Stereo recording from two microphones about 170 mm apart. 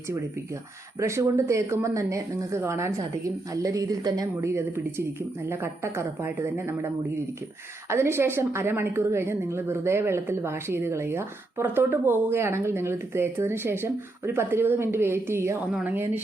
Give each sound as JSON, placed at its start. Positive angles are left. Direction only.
{"t": 0.9, "sound": "a woman's voice", "side_deg": -15}